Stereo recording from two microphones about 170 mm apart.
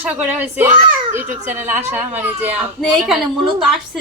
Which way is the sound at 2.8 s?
Centre (ahead or behind).